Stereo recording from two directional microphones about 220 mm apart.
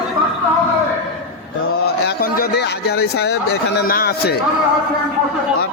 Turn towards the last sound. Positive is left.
turn(degrees=45)  # may be behind; listen again after turning